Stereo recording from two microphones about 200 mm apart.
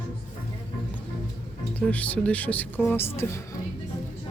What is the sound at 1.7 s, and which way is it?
Speech, 5° left (ahead or behind).